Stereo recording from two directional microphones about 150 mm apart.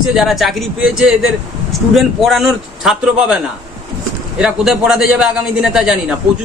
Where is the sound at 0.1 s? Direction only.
Centre (ahead or behind).